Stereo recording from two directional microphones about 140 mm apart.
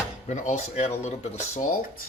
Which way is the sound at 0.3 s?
60° left (ahead or behind).